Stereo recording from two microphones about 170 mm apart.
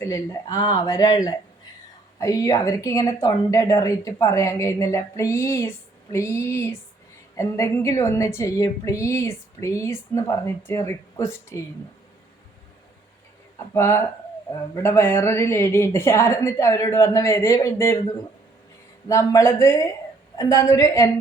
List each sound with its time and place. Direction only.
0.0 s speech: 20° left (ahead or behind)
13.6 s speech: 15° left (ahead or behind)
19.0 s speech: 20° left (ahead or behind)